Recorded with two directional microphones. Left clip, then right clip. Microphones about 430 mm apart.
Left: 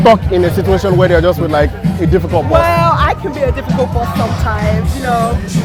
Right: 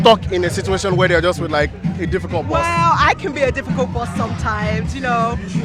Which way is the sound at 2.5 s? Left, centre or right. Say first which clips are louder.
Left 4 dB; centre.